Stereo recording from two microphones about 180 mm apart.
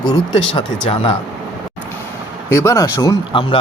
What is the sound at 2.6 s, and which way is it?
Speech, 15° left (ahead or behind).